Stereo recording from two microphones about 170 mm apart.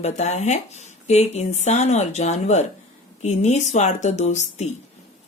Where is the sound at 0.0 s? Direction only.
40° left (ahead or behind).